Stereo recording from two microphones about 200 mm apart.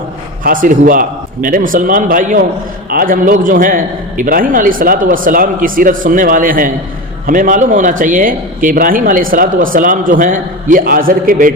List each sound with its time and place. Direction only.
0.4 s speech: 45° right (ahead or behind)